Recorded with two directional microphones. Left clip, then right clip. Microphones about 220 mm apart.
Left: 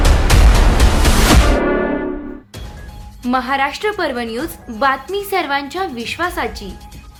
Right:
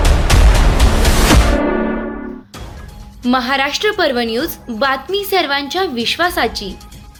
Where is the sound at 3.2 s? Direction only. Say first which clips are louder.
Right 1 dB; 10° right (ahead or behind).